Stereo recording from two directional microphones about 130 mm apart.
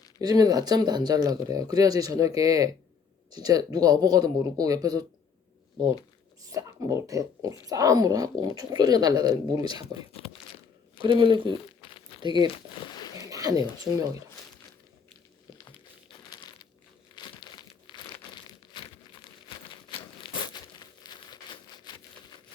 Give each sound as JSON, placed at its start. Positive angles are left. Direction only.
{"t": 0.2, "sound": "speech", "side_deg": -30}
{"t": 6.5, "sound": "speech", "side_deg": -25}
{"t": 10.1, "sound": "crumpling", "side_deg": 45}
{"t": 11.0, "sound": "speech", "side_deg": -35}
{"t": 11.8, "sound": "a sound", "side_deg": 40}
{"t": 12.2, "sound": "speech", "side_deg": -35}
{"t": 12.7, "sound": "a sound", "side_deg": 35}
{"t": 13.1, "sound": "speech", "side_deg": -25}
{"t": 16.0, "sound": "crumpling", "side_deg": 40}